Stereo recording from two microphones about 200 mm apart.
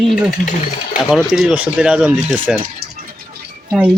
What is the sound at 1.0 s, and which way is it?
Speech, centre (ahead or behind).